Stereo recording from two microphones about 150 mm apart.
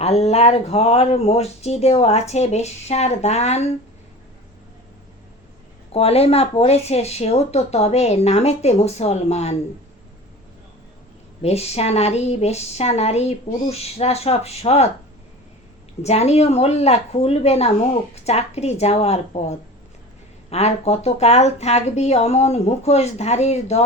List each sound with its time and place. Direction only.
0.0 s speech: 45° left (ahead or behind)
5.9 s speech: 40° left (ahead or behind)
11.4 s speech: 45° left (ahead or behind)
16.0 s speech: 45° left (ahead or behind)